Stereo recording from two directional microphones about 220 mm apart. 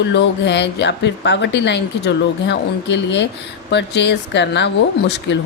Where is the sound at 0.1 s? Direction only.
50° left (ahead or behind).